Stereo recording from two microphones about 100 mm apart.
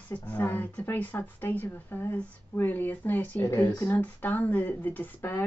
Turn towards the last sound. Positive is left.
turn(degrees=20)  # may be behind; listen again after turning